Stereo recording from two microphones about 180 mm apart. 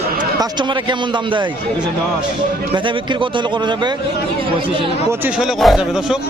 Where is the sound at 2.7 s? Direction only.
25° right (ahead or behind).